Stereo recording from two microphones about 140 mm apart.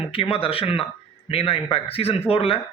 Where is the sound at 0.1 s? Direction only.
40° left (ahead or behind).